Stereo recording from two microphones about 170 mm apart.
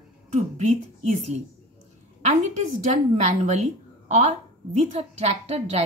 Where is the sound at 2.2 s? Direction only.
45° right (ahead or behind).